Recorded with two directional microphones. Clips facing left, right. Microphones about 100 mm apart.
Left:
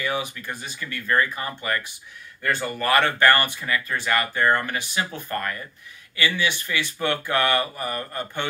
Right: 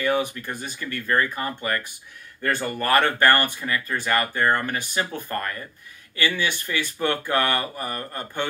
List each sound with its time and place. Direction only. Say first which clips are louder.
0.0 s speech: right 4 dB; 50° right (ahead or behind)
4.3 s speech: left 3 dB; 15° right (ahead or behind)
4.6 s speech: right 1 dB; 45° right (ahead or behind)
6.1 s speech: even; 45° right (ahead or behind)